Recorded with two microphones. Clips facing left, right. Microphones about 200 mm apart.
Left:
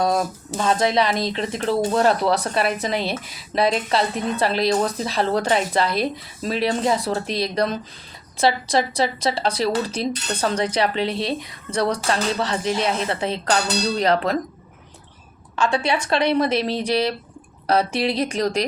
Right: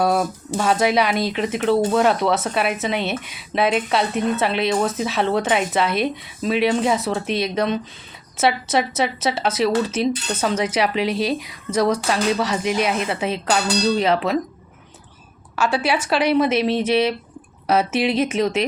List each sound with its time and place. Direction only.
0.0 s speech: 5° right (ahead or behind)
11.1 s speech: 30° left (ahead or behind)
11.7 s speech: 5° right (ahead or behind)
15.5 s speech: 5° right (ahead or behind)